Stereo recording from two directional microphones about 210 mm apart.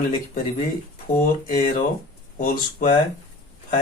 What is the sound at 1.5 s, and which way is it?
Speech, 40° left (ahead or behind).